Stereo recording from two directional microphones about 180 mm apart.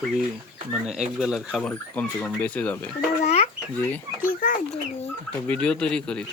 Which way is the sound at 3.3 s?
40° left (ahead or behind).